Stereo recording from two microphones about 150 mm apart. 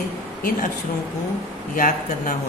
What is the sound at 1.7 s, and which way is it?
Mantra, 60° left (ahead or behind).